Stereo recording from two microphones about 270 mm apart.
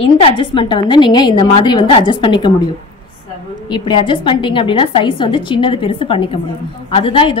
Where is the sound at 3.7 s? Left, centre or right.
Centre.